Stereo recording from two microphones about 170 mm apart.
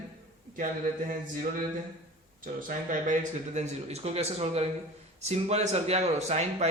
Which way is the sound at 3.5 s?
40° right (ahead or behind).